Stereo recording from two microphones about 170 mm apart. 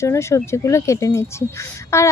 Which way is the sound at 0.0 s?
15° left (ahead or behind).